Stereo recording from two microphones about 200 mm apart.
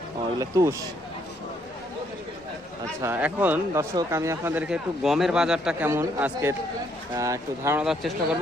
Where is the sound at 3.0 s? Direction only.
10° right (ahead or behind).